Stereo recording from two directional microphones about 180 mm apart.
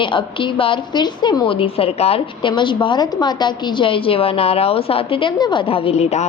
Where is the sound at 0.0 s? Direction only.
25° left (ahead or behind).